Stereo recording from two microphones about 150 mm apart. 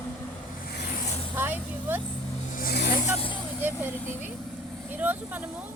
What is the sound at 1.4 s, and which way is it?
Vehicle, 15° right (ahead or behind).